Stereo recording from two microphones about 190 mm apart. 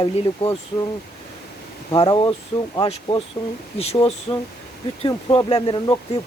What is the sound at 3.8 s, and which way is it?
Speech, 30° left (ahead or behind).